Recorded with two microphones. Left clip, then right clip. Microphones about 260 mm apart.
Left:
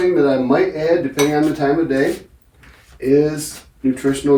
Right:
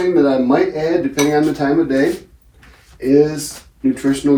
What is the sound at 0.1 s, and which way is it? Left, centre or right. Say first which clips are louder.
Speech: right 1 dB; centre.